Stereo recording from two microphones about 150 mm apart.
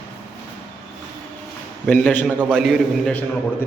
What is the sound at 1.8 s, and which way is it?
Speech, 10° left (ahead or behind).